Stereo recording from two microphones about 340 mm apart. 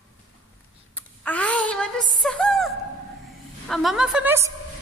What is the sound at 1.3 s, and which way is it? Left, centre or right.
A woman's voice, centre.